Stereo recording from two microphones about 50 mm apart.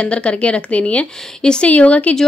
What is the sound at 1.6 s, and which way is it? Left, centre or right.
Speech, left.